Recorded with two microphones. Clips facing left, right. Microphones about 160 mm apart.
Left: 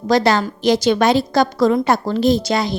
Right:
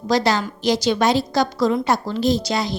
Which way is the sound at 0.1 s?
55° left (ahead or behind).